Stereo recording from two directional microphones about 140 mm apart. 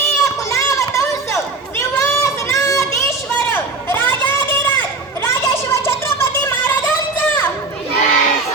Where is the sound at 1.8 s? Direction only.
20° left (ahead or behind).